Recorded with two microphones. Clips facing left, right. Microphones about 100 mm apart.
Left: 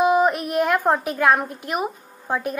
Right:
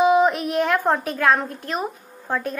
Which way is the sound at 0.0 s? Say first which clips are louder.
Right 1 dB; centre (ahead or behind).